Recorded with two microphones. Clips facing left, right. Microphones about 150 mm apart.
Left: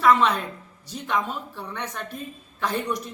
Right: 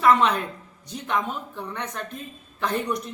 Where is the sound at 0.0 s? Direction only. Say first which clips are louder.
Even; centre (ahead or behind).